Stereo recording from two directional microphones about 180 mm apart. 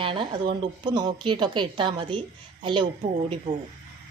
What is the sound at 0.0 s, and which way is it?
A woman's voice, 30° right (ahead or behind).